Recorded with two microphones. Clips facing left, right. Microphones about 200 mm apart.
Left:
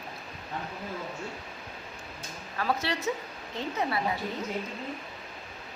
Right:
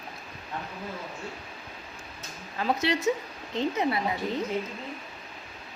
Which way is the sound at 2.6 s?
20° right (ahead or behind).